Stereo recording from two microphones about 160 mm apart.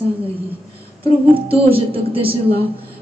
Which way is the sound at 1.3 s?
35° right (ahead or behind).